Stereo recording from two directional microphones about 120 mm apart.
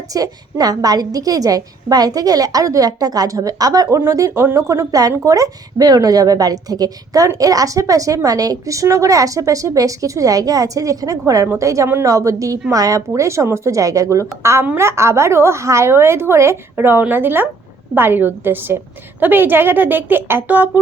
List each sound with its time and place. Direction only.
0.1 s a woman's voice: 30° right (ahead or behind)